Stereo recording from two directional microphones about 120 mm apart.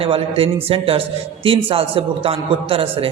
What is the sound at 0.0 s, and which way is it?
A man's voice, 50° right (ahead or behind).